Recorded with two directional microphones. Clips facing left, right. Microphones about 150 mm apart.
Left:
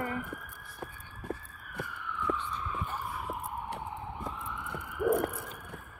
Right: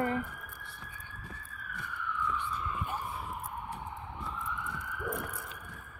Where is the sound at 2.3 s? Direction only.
65° left (ahead or behind).